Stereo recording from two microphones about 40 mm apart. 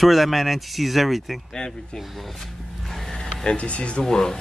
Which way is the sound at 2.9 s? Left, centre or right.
Centre.